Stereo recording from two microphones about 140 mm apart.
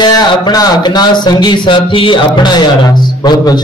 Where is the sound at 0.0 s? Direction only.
25° left (ahead or behind).